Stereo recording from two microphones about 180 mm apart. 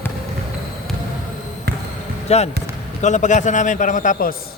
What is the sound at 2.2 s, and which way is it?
A man's voice, 35° left (ahead or behind).